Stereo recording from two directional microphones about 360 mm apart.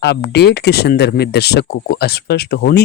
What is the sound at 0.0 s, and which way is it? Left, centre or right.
Speech, left.